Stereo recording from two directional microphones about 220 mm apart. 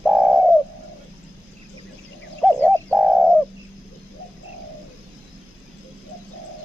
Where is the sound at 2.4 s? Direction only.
5° left (ahead or behind).